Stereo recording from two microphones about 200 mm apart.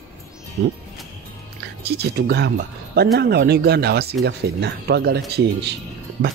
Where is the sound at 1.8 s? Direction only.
55° right (ahead or behind).